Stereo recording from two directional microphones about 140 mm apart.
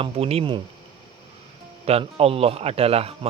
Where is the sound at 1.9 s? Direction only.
45° right (ahead or behind).